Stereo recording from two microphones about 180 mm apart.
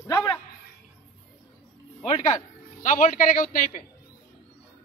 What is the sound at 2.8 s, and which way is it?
A man's voice, 45° left (ahead or behind).